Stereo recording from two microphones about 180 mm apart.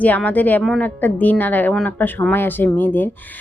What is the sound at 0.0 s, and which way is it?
A woman's voice, 10° left (ahead or behind).